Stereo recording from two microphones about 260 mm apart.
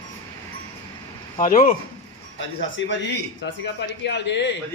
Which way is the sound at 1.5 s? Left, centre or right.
Left.